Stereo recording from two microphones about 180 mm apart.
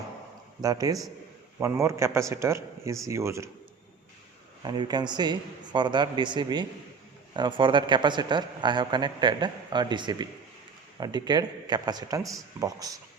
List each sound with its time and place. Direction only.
0.6 s a man's voice: 20° right (ahead or behind)
4.6 s a man's voice: 25° right (ahead or behind)